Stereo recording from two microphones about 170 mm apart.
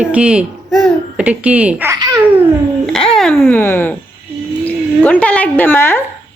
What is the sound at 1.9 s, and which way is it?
Babbling, 20° right (ahead or behind).